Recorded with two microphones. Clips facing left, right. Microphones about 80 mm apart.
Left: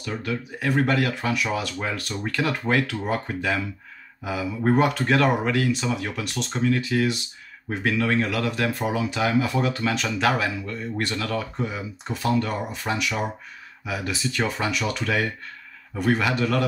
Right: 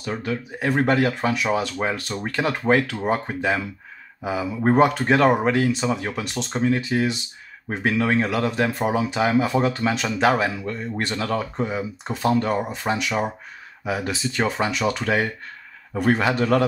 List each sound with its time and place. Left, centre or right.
0.2 s a man's voice: right